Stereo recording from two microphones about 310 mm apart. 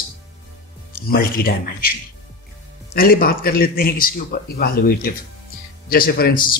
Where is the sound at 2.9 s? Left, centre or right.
Left.